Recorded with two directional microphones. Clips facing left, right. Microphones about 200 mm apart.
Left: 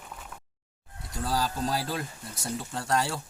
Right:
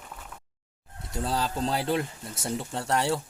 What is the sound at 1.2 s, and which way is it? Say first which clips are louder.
Speech: right 1 dB; 25° right (ahead or behind).